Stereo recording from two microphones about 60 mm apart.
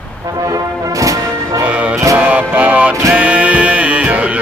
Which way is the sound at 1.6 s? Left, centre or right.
Right.